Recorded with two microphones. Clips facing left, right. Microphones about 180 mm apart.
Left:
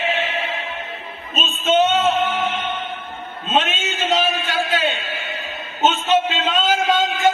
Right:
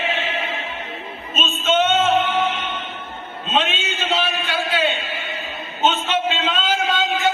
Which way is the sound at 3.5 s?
45° left (ahead or behind).